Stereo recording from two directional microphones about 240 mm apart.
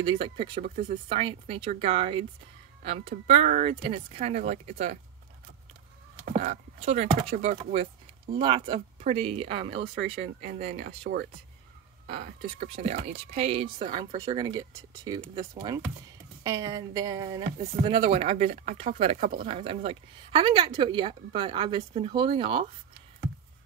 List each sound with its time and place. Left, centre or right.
0.0 s speech: right
6.2 s speech: right
10.9 s speech: right
12.4 s speech: right